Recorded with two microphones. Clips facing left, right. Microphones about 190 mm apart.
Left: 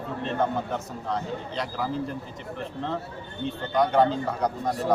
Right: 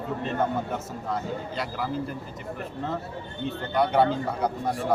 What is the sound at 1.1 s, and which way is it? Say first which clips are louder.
Speech: even; 5° right (ahead or behind).